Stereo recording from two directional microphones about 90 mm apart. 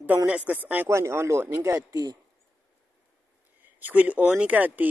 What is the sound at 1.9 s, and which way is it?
Speech, 45° right (ahead or behind).